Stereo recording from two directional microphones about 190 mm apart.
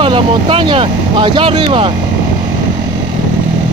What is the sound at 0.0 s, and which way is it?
Speech, 25° right (ahead or behind).